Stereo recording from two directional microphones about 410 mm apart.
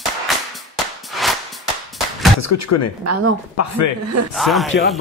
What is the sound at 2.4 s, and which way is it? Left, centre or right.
Speech, left.